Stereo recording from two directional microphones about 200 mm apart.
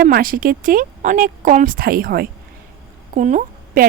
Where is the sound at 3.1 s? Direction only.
40° right (ahead or behind).